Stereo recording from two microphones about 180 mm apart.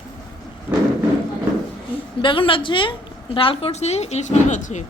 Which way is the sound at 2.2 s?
30° left (ahead or behind).